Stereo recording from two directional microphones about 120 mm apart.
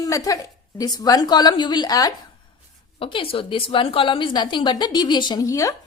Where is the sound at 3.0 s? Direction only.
45° left (ahead or behind).